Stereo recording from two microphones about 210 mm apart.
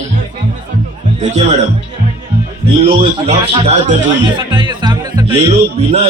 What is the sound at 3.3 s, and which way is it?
Speech, 30° right (ahead or behind).